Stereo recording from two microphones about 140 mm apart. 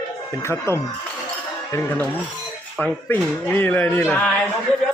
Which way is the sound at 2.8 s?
10° left (ahead or behind).